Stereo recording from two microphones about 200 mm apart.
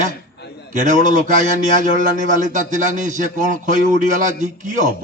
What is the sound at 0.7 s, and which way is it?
A man's voice, 40° right (ahead or behind).